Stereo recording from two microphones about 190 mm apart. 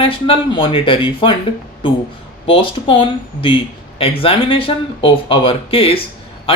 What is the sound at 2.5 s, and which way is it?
Speech, 25° left (ahead or behind).